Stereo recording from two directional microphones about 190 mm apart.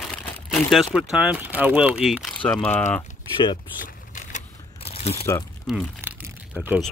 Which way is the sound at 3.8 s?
40° left (ahead or behind).